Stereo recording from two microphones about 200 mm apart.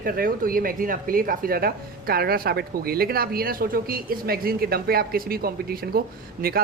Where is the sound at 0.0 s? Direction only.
45° right (ahead or behind).